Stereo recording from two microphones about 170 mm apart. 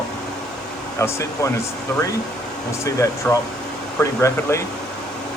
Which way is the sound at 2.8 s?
20° left (ahead or behind).